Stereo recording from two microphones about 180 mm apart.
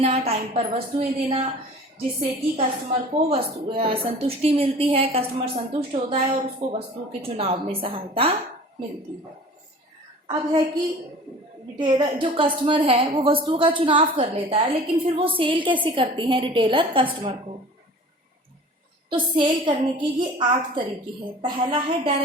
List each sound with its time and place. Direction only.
0.0 s a woman's voice: 35° right (ahead or behind)
11.8 s a woman's voice: 25° right (ahead or behind)
19.1 s a woman's voice: 25° right (ahead or behind)